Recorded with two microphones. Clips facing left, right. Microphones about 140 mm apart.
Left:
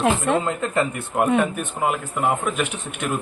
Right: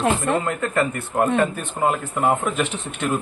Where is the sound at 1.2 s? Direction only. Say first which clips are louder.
Left 1 dB; 5° left (ahead or behind).